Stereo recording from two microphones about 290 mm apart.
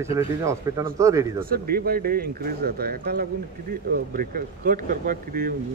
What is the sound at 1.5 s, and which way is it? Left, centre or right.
Speech, right.